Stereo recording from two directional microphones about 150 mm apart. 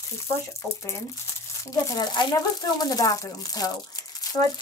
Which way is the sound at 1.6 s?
25° left (ahead or behind).